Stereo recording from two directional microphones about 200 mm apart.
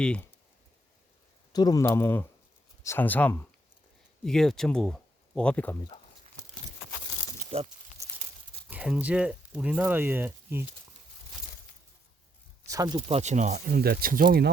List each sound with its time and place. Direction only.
0.0 s speech: 5° left (ahead or behind)
1.5 s speech: 20° left (ahead or behind)
8.0 s crumpling: 15° right (ahead or behind)
8.7 s speech: 5° right (ahead or behind)
12.6 s speech: 15° right (ahead or behind)
13.1 s speech: 35° right (ahead or behind)